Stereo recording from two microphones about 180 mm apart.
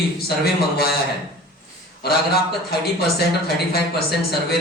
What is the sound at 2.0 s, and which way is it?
Speech, 60° left (ahead or behind).